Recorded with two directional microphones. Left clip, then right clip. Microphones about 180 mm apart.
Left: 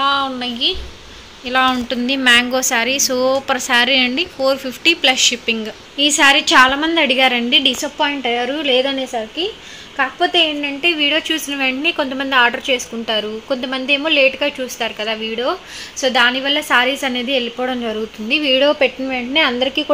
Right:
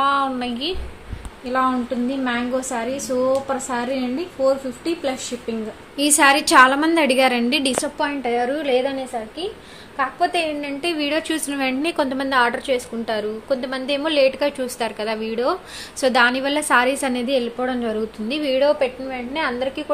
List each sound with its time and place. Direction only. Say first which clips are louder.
0.0 s a sound: left 2 dB; 5° right (ahead or behind)
1.5 s a woman's voice: left 5 dB; 15° left (ahead or behind)
5.9 s a woman's voice: left 4 dB; 5° right (ahead or behind)
7.8 s a woman's voice: left 4 dB; 15° left (ahead or behind)
10.8 s a woman's voice: left 7 dB; 5° left (ahead or behind)
17.6 s a woman's voice: left 2 dB; 15° left (ahead or behind)
18.7 s a woman's voice: left 4 dB; 35° left (ahead or behind)